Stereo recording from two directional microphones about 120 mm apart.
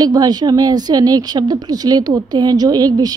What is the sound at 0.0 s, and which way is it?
A woman's voice, 35° right (ahead or behind).